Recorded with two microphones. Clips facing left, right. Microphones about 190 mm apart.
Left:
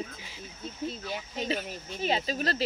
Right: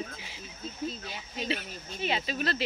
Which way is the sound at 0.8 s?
50° left (ahead or behind).